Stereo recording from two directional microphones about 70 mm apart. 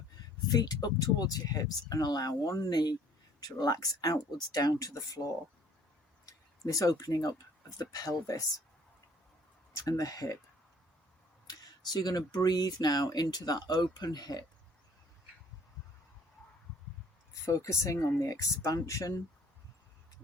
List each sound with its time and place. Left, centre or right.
0.5 s speech: left
6.2 s a sound: left
6.9 s speech: left
9.7 s speech: left
11.4 s speech: left
17.4 s speech: left